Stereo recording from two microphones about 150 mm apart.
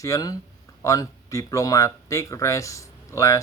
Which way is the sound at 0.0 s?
25° left (ahead or behind).